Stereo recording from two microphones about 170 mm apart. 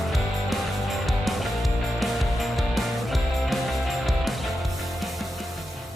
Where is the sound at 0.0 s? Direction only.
Centre (ahead or behind).